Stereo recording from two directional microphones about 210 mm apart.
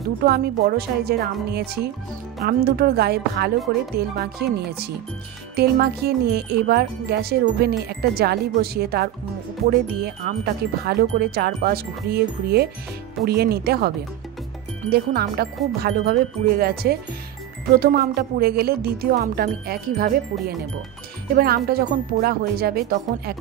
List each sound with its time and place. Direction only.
0.2 s speech: 45° right (ahead or behind)
10.2 s speech: 45° right (ahead or behind)